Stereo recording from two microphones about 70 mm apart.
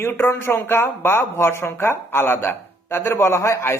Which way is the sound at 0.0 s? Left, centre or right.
Left.